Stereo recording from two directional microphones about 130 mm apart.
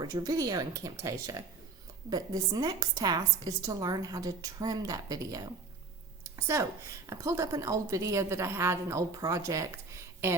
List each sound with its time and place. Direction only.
0.0 s a woman's voice: 30° right (ahead or behind)